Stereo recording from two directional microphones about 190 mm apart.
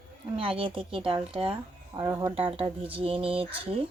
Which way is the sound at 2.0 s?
20° right (ahead or behind).